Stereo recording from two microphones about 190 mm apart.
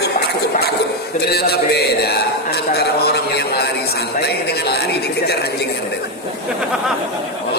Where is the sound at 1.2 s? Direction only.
60° left (ahead or behind).